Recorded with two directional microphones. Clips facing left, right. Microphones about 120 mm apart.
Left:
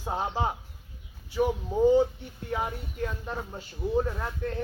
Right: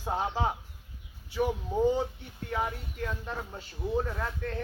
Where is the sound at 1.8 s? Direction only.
10° left (ahead or behind).